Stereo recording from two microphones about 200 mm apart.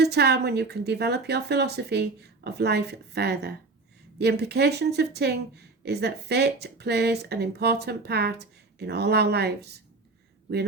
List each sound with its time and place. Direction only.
0.0 s speech: 55° right (ahead or behind)